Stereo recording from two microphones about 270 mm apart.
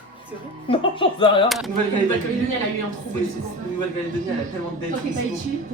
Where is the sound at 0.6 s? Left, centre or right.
Centre.